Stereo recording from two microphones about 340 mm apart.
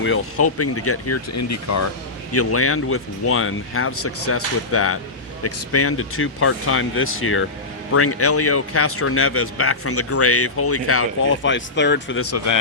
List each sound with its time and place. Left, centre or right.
0.0 s speech: left